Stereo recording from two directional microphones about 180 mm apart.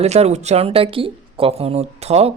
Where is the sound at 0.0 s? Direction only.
35° right (ahead or behind).